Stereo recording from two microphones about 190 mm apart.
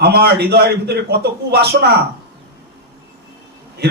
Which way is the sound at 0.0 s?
60° right (ahead or behind).